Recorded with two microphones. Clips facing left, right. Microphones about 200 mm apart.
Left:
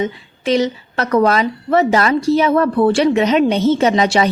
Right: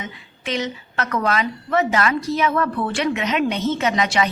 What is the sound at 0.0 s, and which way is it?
A woman's voice, 35° left (ahead or behind).